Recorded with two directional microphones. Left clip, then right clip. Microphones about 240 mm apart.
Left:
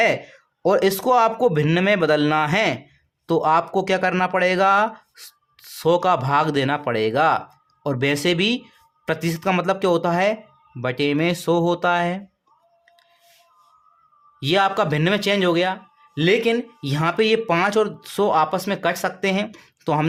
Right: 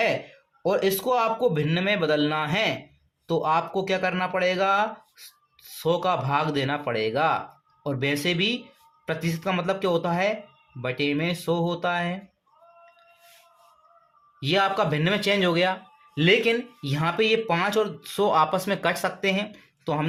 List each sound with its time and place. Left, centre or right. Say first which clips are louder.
0.6 s speech: left 5 dB; left
14.3 s speech: left 4 dB; left